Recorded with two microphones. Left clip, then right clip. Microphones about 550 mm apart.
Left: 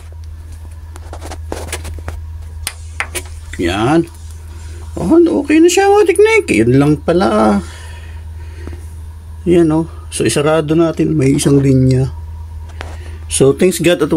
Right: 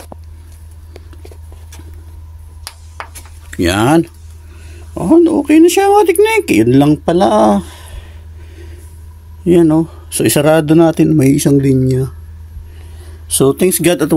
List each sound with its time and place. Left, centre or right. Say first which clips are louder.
3.4 s speech: right 3 dB; right
9.4 s speech: right 2 dB; right
13.5 s speech: even; right